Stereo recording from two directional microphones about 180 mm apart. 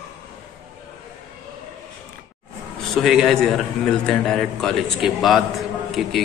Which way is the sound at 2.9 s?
Centre (ahead or behind).